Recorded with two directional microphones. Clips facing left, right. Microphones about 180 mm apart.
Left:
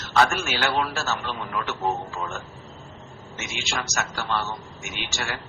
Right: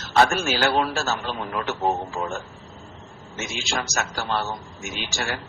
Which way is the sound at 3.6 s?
35° right (ahead or behind).